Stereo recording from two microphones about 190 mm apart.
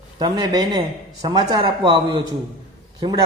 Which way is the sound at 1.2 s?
20° right (ahead or behind).